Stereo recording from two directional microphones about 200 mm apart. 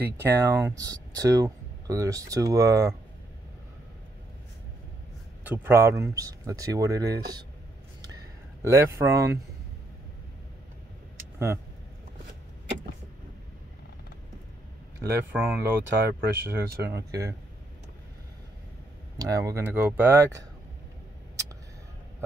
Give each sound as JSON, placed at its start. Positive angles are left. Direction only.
{"t": 0.0, "sound": "speech", "side_deg": -15}
{"t": 5.4, "sound": "speech", "side_deg": -10}
{"t": 8.6, "sound": "speech", "side_deg": -15}
{"t": 11.3, "sound": "speech", "side_deg": -15}
{"t": 15.3, "sound": "speech", "side_deg": -10}
{"t": 19.1, "sound": "speech", "side_deg": -20}